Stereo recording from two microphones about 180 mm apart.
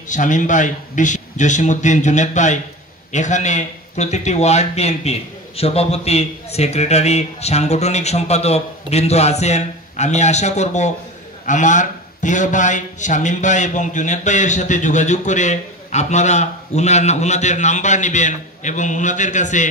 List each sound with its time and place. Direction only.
0.1 s a man's voice: 45° left (ahead or behind)